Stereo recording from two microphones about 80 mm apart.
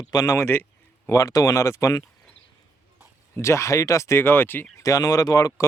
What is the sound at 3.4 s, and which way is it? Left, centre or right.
Speech, left.